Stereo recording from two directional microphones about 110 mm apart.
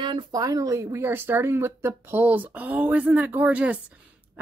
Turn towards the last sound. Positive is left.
turn(degrees=-15)  # may be behind; listen again after turning